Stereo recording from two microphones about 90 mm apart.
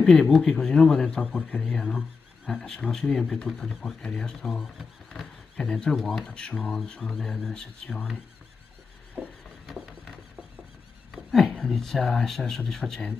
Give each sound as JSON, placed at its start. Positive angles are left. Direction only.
{"t": 0.0, "sound": "speech", "side_deg": 5}
{"t": 11.3, "sound": "speech", "side_deg": 5}